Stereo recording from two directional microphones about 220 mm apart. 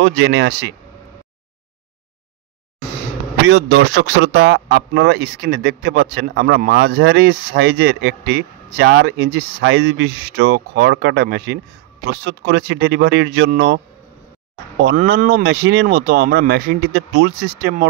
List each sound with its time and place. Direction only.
0.0 s speech: 55° right (ahead or behind)
3.4 s speech: 50° right (ahead or behind)
14.8 s speech: 45° right (ahead or behind)